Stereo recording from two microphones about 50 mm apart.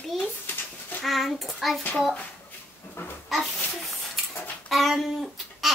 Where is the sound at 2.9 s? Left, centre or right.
Left.